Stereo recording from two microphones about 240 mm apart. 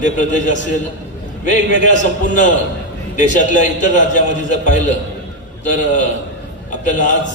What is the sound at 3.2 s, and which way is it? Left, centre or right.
A man's voice, left.